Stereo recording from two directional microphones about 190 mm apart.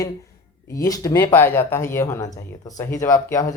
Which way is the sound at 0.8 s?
20° left (ahead or behind).